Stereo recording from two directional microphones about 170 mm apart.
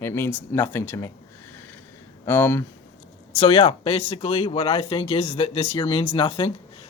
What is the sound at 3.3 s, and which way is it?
Speech, 35° left (ahead or behind).